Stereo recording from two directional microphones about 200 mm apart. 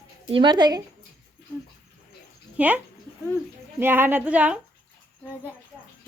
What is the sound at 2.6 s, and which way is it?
Speech, 5° right (ahead or behind).